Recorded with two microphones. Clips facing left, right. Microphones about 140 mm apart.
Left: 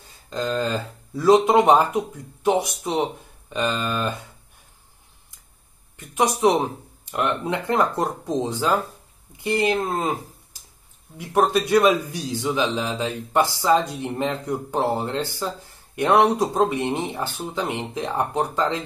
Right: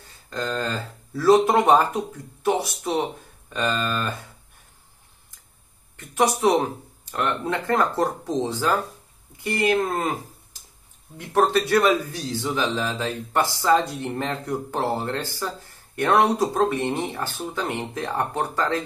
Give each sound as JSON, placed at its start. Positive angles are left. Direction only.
{"t": 0.3, "sound": "speech", "side_deg": 20}
{"t": 5.9, "sound": "speech", "side_deg": 20}
{"t": 11.1, "sound": "speech", "side_deg": 10}